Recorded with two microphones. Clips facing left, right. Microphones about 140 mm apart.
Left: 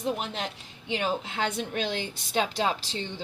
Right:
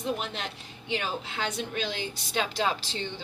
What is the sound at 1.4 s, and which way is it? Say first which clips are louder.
Speech: left 1 dB; 55° left (ahead or behind).